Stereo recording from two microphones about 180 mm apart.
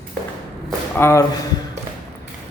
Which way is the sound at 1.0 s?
15° left (ahead or behind).